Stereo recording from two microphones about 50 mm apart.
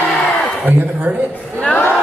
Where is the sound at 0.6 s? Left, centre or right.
Right.